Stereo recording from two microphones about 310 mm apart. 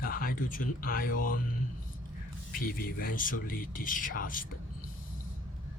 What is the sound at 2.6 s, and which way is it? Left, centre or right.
Speech, left.